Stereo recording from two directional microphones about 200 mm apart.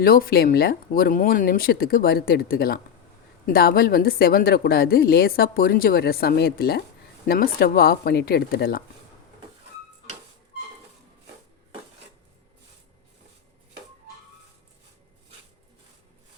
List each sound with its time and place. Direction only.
0.0 s a woman's voice: 50° left (ahead or behind)